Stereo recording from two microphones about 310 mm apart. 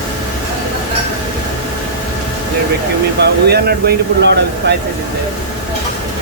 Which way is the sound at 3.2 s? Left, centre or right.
Right.